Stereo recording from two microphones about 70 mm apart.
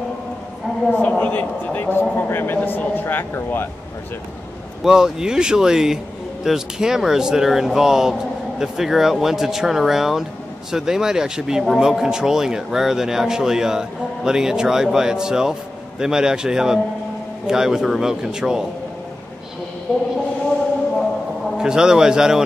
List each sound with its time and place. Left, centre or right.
0.9 s a man's voice: left
4.8 s a man's voice: centre
21.5 s a man's voice: centre